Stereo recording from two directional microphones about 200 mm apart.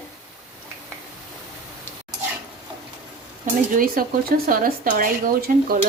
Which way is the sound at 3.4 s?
45° right (ahead or behind).